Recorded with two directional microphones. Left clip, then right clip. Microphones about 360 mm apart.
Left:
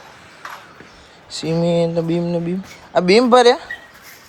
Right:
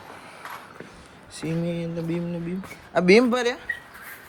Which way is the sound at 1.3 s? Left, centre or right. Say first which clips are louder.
Left 12 dB; centre.